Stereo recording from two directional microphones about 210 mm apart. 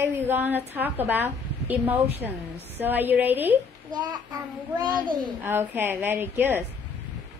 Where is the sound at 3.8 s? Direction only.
20° right (ahead or behind).